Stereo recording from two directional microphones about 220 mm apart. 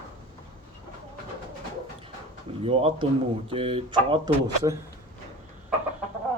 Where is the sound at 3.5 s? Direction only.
25° right (ahead or behind).